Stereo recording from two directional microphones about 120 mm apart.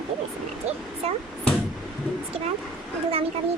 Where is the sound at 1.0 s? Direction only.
60° right (ahead or behind).